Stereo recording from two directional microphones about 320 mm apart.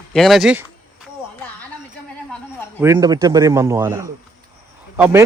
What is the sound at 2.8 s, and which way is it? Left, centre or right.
Speech, centre.